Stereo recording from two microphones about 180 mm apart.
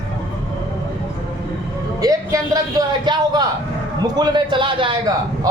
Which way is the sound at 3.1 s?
25° right (ahead or behind).